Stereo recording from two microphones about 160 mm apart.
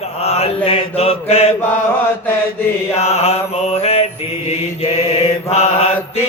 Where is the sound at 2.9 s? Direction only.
40° left (ahead or behind).